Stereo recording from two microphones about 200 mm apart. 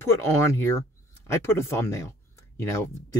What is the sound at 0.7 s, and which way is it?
Speech, 15° left (ahead or behind).